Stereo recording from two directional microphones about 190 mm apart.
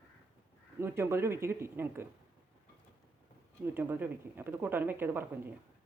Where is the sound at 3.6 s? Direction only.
10° right (ahead or behind).